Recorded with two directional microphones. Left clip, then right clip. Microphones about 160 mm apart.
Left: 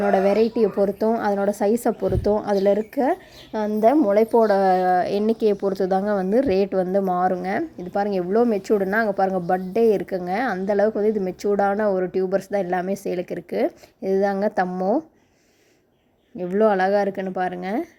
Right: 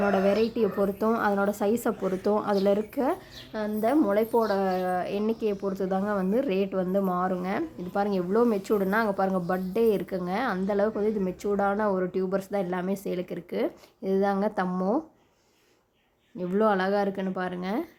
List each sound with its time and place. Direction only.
0.1 s a woman's voice: 20° left (ahead or behind)
3.6 s a woman's voice: 30° left (ahead or behind)
16.4 s a woman's voice: 25° left (ahead or behind)